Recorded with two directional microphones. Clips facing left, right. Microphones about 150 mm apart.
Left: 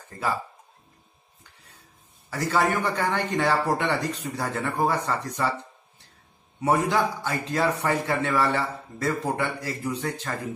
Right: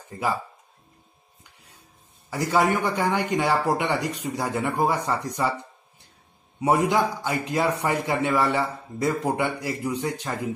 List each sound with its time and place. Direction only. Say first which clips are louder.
2.2 s a man's voice: right 2 dB; 15° right (ahead or behind)
6.6 s a man's voice: right 2 dB; 15° right (ahead or behind)